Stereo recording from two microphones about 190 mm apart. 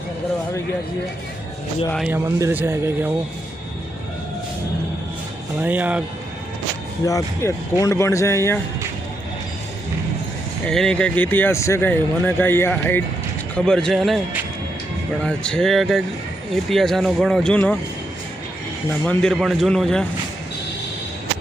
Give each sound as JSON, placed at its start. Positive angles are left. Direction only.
{"t": 2.0, "sound": "speech", "side_deg": -15}
{"t": 5.6, "sound": "speech", "side_deg": -10}
{"t": 7.0, "sound": "speech", "side_deg": 15}
{"t": 10.7, "sound": "speech", "side_deg": 5}
{"t": 15.3, "sound": "speech", "side_deg": 5}
{"t": 19.0, "sound": "speech", "side_deg": 5}